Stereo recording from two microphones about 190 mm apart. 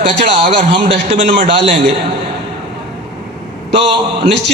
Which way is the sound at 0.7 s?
70° right (ahead or behind).